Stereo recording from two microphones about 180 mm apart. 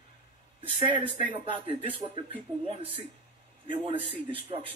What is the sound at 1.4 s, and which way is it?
Speech, 30° right (ahead or behind).